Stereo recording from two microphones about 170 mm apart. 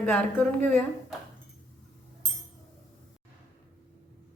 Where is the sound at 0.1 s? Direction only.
5° left (ahead or behind).